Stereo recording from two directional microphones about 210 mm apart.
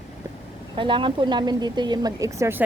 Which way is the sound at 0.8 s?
20° right (ahead or behind).